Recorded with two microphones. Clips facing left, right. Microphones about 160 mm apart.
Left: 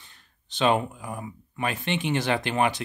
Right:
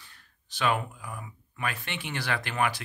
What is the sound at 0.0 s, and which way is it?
Speech, 25° left (ahead or behind).